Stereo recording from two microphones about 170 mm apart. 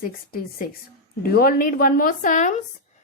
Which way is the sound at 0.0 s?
60° left (ahead or behind).